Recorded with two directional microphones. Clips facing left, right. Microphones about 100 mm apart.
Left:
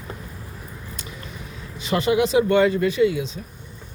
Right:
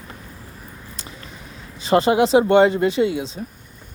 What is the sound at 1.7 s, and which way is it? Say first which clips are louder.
Speech: right 4 dB; 35° right (ahead or behind).